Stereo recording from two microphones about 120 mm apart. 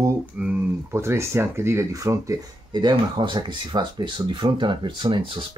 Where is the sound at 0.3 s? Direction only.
10° right (ahead or behind).